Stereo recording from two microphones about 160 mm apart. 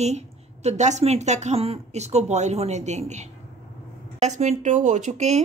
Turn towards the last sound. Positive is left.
turn(degrees=-45)  # may be behind; listen again after turning